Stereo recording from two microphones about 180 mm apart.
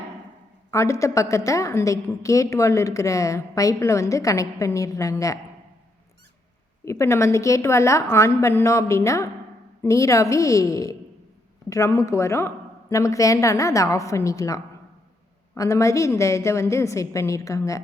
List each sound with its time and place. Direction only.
0.7 s a woman's voice: 15° left (ahead or behind)
6.8 s a woman's voice: 15° left (ahead or behind)